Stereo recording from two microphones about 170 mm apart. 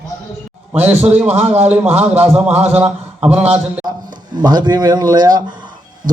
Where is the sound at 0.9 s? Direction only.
10° right (ahead or behind).